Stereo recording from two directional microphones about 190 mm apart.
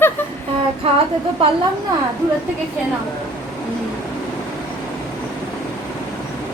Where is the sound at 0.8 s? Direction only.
30° right (ahead or behind).